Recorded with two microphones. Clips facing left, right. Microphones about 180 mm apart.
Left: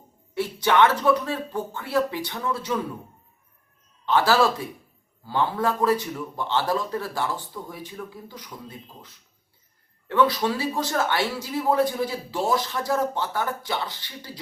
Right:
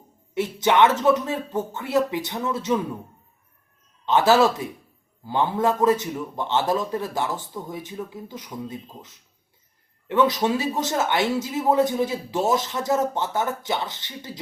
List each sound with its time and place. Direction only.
0.3 s a man's voice: 20° right (ahead or behind)
4.0 s a man's voice: 20° right (ahead or behind)